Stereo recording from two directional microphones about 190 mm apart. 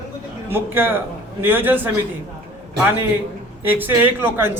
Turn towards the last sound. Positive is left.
turn(degrees=-10)  # may be behind; listen again after turning